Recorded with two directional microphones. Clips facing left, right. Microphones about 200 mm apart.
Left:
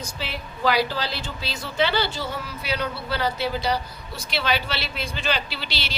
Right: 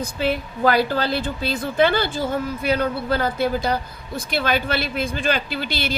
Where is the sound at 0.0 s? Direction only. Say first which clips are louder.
Right 10 dB; 50° right (ahead or behind).